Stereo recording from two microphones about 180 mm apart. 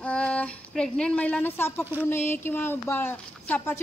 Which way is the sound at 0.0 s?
5° left (ahead or behind).